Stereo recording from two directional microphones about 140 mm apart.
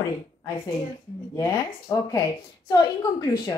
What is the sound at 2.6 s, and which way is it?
Speech, 30° left (ahead or behind).